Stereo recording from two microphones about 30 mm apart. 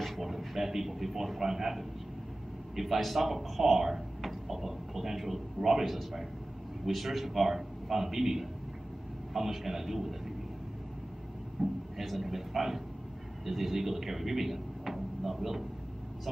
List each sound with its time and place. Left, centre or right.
0.6 s a man's voice: centre
11.6 s speech: centre